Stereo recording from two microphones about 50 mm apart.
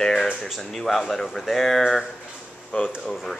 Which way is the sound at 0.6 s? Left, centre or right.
Centre.